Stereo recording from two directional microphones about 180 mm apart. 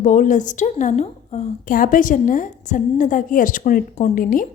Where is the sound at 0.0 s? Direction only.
45° left (ahead or behind).